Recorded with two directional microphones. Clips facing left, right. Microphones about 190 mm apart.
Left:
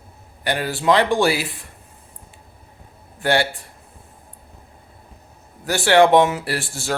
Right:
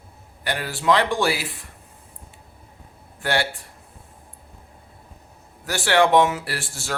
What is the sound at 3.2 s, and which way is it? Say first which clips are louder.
Speech: left 4 dB; 20° left (ahead or behind).